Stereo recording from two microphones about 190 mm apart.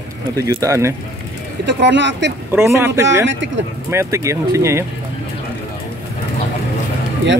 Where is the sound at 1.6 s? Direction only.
70° right (ahead or behind).